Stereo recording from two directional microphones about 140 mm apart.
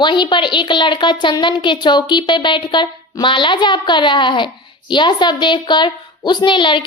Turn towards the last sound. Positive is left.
turn(degrees=35)  # may be behind; listen again after turning